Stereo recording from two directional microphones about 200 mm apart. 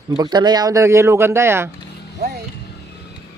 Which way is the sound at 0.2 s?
20° right (ahead or behind).